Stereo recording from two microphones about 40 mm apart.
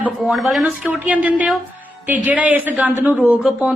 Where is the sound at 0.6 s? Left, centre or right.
Right.